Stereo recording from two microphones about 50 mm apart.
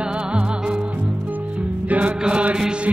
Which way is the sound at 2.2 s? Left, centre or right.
Centre.